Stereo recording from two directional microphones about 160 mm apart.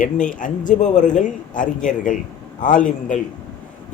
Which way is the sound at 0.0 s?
55° left (ahead or behind).